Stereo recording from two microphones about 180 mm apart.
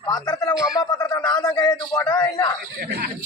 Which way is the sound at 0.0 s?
20° left (ahead or behind).